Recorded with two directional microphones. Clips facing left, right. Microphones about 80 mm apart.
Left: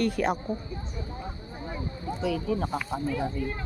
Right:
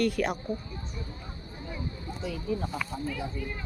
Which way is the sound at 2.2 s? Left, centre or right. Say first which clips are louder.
Left 4 dB; left.